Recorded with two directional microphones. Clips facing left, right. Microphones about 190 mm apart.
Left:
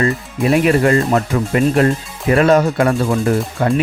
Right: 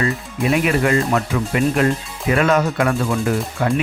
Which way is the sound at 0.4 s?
35° left (ahead or behind).